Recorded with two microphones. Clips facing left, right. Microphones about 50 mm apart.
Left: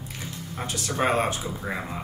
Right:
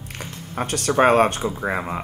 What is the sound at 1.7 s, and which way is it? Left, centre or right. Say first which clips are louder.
Speech: right 6 dB; right.